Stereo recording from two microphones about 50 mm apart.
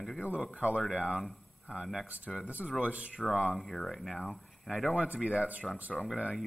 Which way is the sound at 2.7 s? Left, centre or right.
Right.